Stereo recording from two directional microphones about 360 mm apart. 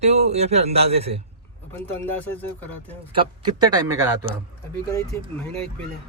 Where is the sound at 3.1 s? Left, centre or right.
Centre.